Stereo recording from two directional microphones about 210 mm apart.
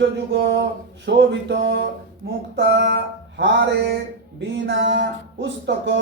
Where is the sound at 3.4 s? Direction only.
55° right (ahead or behind).